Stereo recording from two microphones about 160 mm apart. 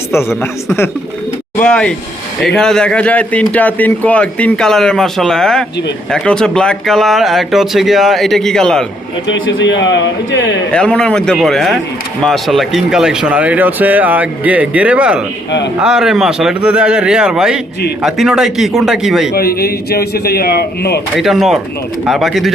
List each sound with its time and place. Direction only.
1.5 s a man's voice: 5° left (ahead or behind)
9.6 s speech: 90° left
10.7 s a man's voice: 5° left (ahead or behind)
19.3 s speech: 75° left (ahead or behind)
21.2 s a man's voice: centre (ahead or behind)